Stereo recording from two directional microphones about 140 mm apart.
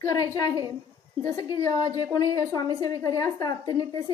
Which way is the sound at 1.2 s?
25° left (ahead or behind).